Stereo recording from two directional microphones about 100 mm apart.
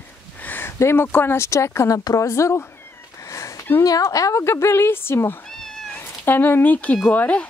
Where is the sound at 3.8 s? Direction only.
35° left (ahead or behind).